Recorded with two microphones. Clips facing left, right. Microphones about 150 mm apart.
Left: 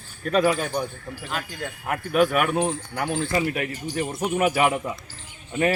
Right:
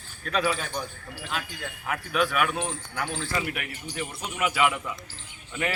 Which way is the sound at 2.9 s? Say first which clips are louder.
Left 4 dB; 15° left (ahead or behind).